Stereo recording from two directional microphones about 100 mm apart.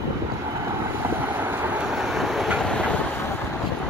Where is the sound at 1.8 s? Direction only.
5° right (ahead or behind).